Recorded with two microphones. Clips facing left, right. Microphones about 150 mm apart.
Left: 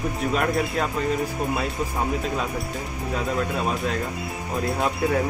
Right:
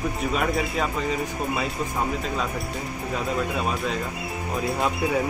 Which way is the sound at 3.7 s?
Centre (ahead or behind).